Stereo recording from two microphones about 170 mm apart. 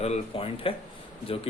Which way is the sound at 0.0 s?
35° left (ahead or behind).